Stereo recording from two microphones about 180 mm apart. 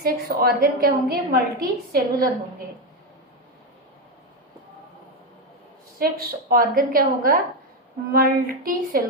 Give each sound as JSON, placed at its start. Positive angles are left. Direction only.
{"t": 0.0, "sound": "a woman's voice", "side_deg": -55}
{"t": 6.0, "sound": "a woman's voice", "side_deg": -55}